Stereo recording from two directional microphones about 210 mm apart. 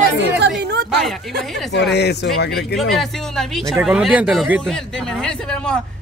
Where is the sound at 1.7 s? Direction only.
55° left (ahead or behind).